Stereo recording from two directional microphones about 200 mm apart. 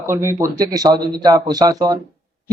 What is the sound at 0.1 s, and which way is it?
A man's voice, 15° right (ahead or behind).